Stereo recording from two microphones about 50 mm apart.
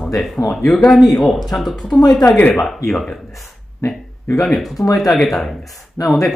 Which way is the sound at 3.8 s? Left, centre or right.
Left.